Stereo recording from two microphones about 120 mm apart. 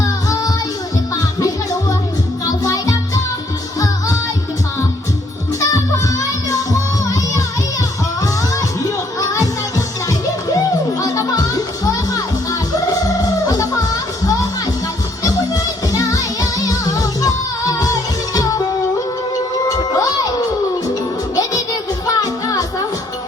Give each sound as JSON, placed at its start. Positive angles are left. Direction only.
{"t": 2.6, "sound": "music", "side_deg": 25}
{"t": 9.2, "sound": "music", "side_deg": 30}
{"t": 11.0, "sound": "music", "side_deg": 30}
{"t": 13.5, "sound": "music", "side_deg": 30}
{"t": 15.9, "sound": "music", "side_deg": 30}
{"t": 22.0, "sound": "music", "side_deg": 30}